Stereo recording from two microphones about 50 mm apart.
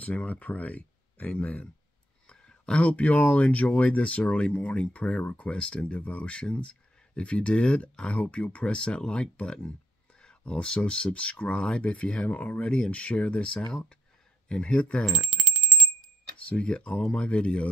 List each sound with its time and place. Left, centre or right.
0.0 s speech: left
15.0 s bicycle bell: centre
16.4 s speech: left